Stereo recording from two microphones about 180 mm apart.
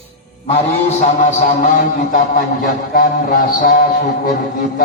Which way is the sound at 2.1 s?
50° left (ahead or behind).